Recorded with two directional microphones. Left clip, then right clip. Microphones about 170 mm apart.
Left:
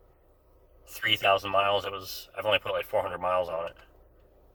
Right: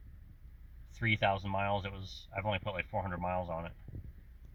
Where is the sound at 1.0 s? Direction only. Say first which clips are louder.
Left 8 dB; 5° left (ahead or behind).